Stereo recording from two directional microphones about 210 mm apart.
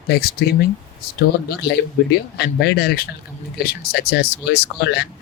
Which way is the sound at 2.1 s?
50° left (ahead or behind).